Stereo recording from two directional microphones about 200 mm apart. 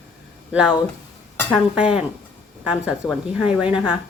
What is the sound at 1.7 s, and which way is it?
A woman's voice, 5° right (ahead or behind).